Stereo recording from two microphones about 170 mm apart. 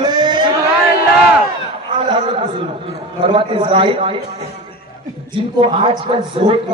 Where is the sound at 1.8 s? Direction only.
30° right (ahead or behind).